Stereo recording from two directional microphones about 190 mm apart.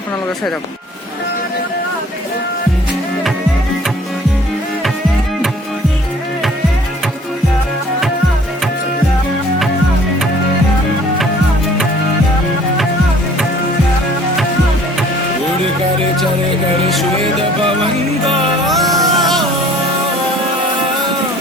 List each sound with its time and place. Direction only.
18.8 s music: 20° right (ahead or behind)